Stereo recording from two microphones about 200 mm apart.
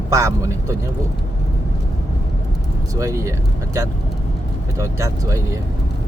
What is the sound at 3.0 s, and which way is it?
Speech, 15° right (ahead or behind).